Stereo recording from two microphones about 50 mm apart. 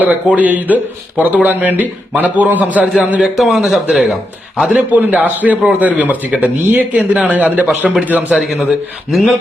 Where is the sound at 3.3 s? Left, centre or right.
Centre.